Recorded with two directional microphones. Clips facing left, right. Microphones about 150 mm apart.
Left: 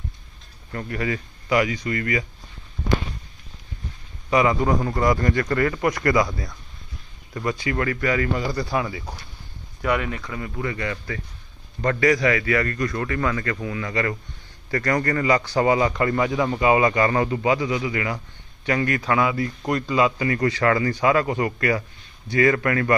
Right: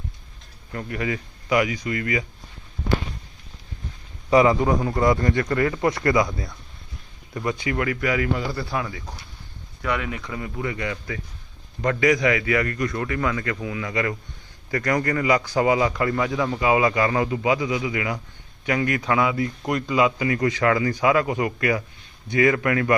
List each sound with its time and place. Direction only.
0.7 s a man's voice: 15° right (ahead or behind)
4.3 s a man's voice: 30° right (ahead or behind)
4.6 s a man's voice: 15° right (ahead or behind)
7.3 s a man's voice: 20° right (ahead or behind); by 10.1 s 5° left (ahead or behind)
10.1 s a man's voice: 15° right (ahead or behind)